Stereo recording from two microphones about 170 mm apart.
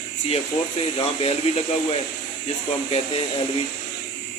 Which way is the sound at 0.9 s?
35° left (ahead or behind).